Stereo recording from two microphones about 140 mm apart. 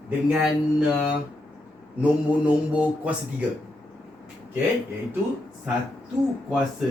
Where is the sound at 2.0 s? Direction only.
10° right (ahead or behind).